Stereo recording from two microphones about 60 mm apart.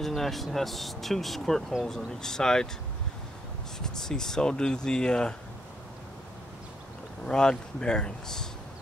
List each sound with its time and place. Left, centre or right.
0.0 s speech: centre
3.8 s speech: centre
7.2 s speech: centre